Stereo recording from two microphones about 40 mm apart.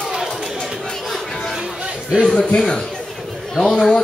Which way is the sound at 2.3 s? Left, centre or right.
Left.